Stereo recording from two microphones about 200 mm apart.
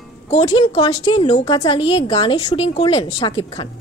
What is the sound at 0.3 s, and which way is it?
A woman's voice, 30° left (ahead or behind).